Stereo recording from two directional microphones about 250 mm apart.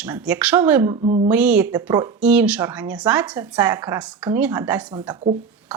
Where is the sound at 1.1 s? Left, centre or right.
Right.